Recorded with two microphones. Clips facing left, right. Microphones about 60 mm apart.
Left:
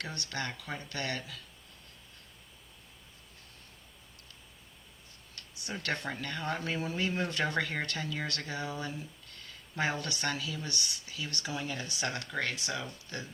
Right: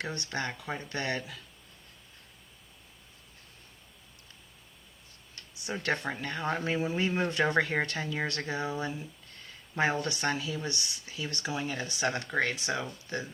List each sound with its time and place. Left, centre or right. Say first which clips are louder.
0.0 s speech: right 3 dB; right
5.3 s tick-tock: right 4 dB; right
6.2 s speech: right 4 dB; right